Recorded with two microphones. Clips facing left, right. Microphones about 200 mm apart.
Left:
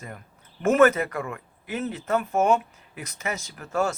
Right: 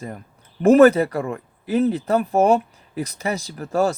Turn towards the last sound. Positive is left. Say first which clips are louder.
# right 6 dB
turn(degrees=-35)  # may be behind; listen again after turning